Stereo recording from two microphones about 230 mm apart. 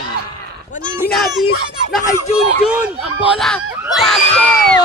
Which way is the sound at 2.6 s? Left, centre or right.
Centre.